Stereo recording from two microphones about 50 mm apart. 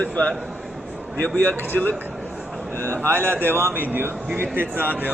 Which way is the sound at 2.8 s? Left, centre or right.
Right.